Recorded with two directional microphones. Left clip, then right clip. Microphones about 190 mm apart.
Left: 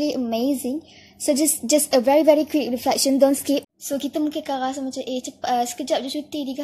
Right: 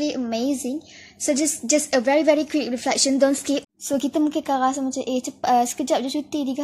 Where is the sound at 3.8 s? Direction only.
25° right (ahead or behind).